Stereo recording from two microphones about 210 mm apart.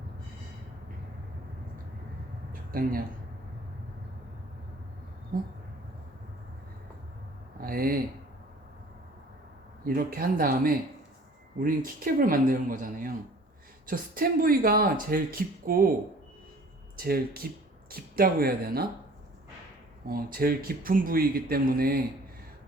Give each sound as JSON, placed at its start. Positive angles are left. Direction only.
{"t": 2.5, "sound": "a sound", "side_deg": -45}
{"t": 5.3, "sound": "speech", "side_deg": -40}
{"t": 7.6, "sound": "speech", "side_deg": -45}
{"t": 9.8, "sound": "speech", "side_deg": -45}
{"t": 17.0, "sound": "speech", "side_deg": -45}
{"t": 20.1, "sound": "speech", "side_deg": -45}